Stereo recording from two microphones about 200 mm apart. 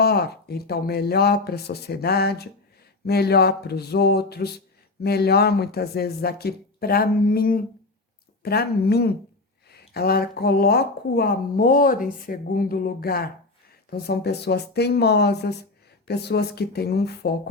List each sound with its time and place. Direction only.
0.0 s a woman's voice: 50° left (ahead or behind)